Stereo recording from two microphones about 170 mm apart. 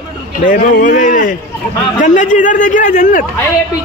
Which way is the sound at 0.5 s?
55° left (ahead or behind).